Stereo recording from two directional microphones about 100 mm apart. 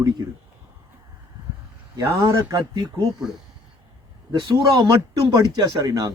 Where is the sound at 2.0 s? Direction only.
30° right (ahead or behind).